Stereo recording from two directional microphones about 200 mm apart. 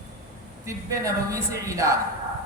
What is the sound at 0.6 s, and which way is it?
A woman's voice, 15° right (ahead or behind).